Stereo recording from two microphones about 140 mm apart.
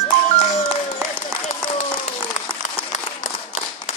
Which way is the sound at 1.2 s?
55° left (ahead or behind).